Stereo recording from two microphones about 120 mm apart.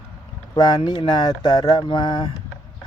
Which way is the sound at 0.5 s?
40° left (ahead or behind).